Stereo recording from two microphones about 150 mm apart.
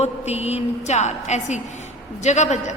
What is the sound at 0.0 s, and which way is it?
A woman's voice, 45° left (ahead or behind).